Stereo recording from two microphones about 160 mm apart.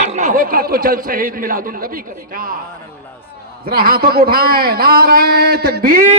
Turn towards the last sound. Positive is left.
turn(degrees=-70)  # may be behind; listen again after turning